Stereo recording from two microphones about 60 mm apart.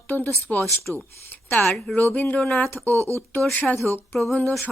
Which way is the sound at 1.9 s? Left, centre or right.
Left.